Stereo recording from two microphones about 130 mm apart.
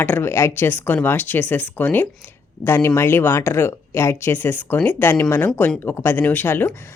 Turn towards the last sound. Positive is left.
turn(degrees=15)  # may be behind; listen again after turning